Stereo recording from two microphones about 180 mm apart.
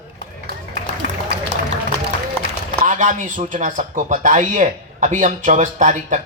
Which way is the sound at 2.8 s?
45° right (ahead or behind).